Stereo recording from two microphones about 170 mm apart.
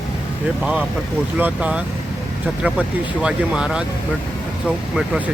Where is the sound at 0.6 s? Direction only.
5° right (ahead or behind).